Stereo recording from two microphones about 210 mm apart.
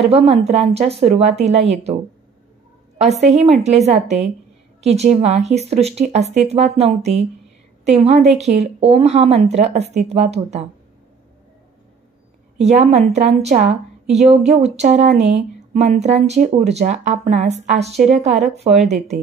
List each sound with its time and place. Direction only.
0.1 s speech: 30° right (ahead or behind)
3.0 s a woman's voice: 30° right (ahead or behind)
12.5 s speech: 30° right (ahead or behind)